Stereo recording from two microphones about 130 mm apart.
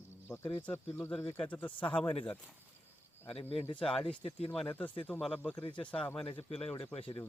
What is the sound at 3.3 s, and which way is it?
Speech, 50° left (ahead or behind).